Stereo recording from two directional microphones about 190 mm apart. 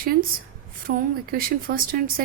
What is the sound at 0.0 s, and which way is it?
A woman's voice, 50° right (ahead or behind).